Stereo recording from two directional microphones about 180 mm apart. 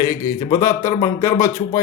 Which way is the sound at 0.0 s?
20° left (ahead or behind).